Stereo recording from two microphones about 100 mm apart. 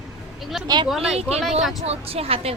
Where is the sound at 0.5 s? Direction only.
5° right (ahead or behind).